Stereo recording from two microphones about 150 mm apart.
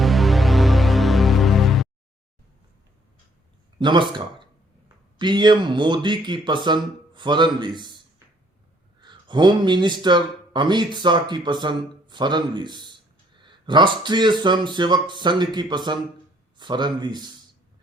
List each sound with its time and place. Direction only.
0.0 s music: centre (ahead or behind)
3.8 s speech: 30° right (ahead or behind)
9.0 s speech: 30° right (ahead or behind)